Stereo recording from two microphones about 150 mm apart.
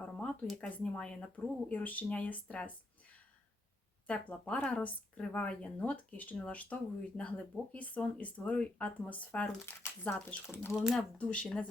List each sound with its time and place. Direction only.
0.0 s speech: 5° left (ahead or behind)
4.0 s speech: 10° left (ahead or behind)
10.8 s speech: 5° right (ahead or behind)
11.2 s speech: 5° left (ahead or behind)